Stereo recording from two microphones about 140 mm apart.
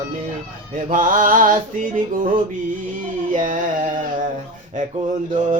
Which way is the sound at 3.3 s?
65° right (ahead or behind).